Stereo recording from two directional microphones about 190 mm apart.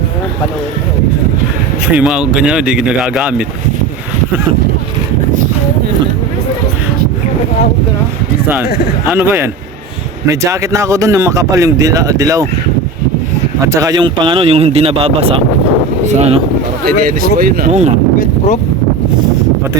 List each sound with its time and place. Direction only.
2.0 s speech: 5° right (ahead or behind)
9.0 s speech: 10° right (ahead or behind)
13.6 s speech: 15° right (ahead or behind); by 16.4 s 35° right (ahead or behind)
16.8 s speech: 50° right (ahead or behind)
17.7 s speech: 35° right (ahead or behind)
18.2 s a sound: 40° left (ahead or behind)